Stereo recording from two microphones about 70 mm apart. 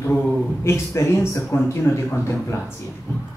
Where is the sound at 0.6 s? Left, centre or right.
Left.